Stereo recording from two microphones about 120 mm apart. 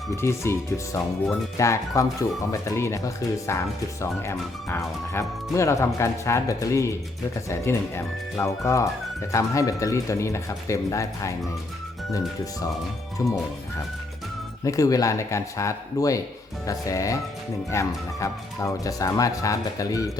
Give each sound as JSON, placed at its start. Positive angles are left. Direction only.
{"t": 0.2, "sound": "speech", "side_deg": 20}
{"t": 4.0, "sound": "speech", "side_deg": 20}
{"t": 13.2, "sound": "speech", "side_deg": 25}
{"t": 14.6, "sound": "speech", "side_deg": 25}